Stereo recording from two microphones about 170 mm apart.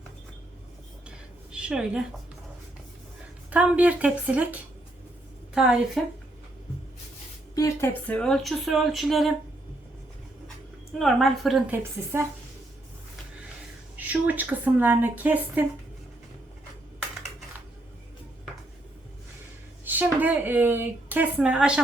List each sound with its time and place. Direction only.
1.5 s a woman's voice: 5° right (ahead or behind)
3.5 s a woman's voice: 10° right (ahead or behind)
5.5 s speech: 5° right (ahead or behind)
7.5 s a woman's voice: 20° left (ahead or behind)
8.0 s speech: 5° left (ahead or behind)
10.9 s speech: centre (ahead or behind)
11.7 s a woman's voice: 15° right (ahead or behind)
14.1 s a woman's voice: 10° right (ahead or behind)
19.8 s a woman's voice: 10° right (ahead or behind)